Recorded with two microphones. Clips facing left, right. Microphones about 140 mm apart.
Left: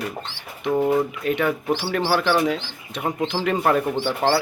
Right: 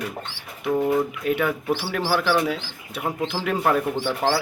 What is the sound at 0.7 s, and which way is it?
Speech, 15° left (ahead or behind).